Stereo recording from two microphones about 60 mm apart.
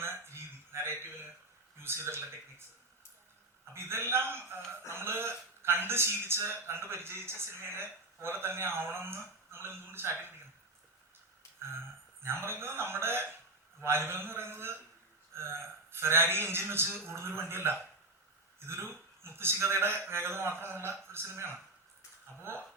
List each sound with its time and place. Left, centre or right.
0.0 s a sound: right
1.8 s a man's voice: right
3.8 s a man's voice: right
12.2 s a man's voice: right